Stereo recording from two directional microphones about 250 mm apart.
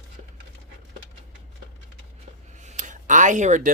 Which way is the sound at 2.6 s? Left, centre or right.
Right.